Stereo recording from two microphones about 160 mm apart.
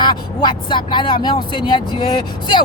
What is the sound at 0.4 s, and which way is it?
Speech, 30° left (ahead or behind).